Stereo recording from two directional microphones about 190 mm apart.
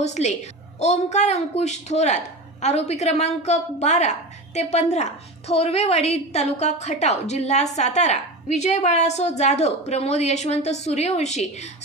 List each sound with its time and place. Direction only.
0.0 s a woman's voice: 35° left (ahead or behind)